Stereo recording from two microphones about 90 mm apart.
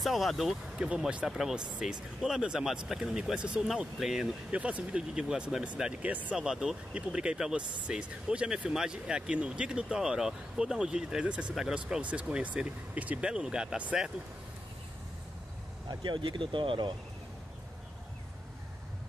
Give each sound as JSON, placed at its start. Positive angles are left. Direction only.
{"t": 0.0, "sound": "speech", "side_deg": 0}
{"t": 4.5, "sound": "speech", "side_deg": -15}
{"t": 15.9, "sound": "speech", "side_deg": -55}